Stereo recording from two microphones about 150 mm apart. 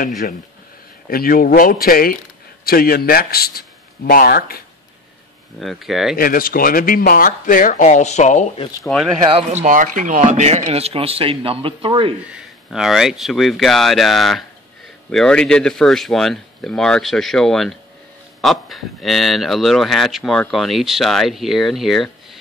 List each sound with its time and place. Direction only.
1.0 s speech: 80° left
2.6 s speech: 85° left
5.6 s speech: centre (ahead or behind)
6.1 s speech: 70° left (ahead or behind); by 8.5 s 50° left (ahead or behind)
8.8 s speech: centre (ahead or behind)
9.2 s speech: 35° right (ahead or behind)
9.5 s speech: 55° right (ahead or behind); by 12.1 s 35° right (ahead or behind)
12.6 s speech: centre (ahead or behind)